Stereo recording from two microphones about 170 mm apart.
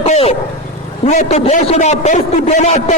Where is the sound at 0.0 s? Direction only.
35° left (ahead or behind).